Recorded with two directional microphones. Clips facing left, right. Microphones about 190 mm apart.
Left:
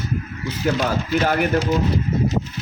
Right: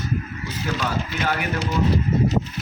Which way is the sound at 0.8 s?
45° left (ahead or behind).